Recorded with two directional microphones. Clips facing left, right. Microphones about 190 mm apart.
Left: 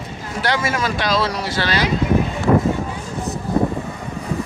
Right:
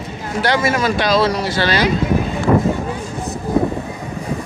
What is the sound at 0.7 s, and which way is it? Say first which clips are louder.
Speech: right 4 dB; centre (ahead or behind).